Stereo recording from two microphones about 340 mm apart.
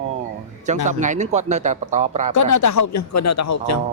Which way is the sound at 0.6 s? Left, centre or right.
Right.